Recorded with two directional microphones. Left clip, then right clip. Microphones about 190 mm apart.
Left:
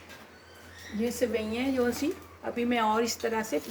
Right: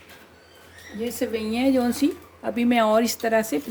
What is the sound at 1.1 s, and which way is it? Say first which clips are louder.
Speech: right 4 dB; 60° right (ahead or behind).